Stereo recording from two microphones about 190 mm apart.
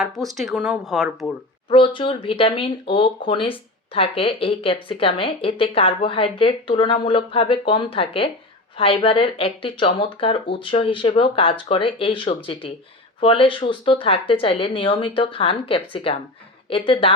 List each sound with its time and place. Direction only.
0.3 s speech: centre (ahead or behind)
1.7 s speech: 25° left (ahead or behind)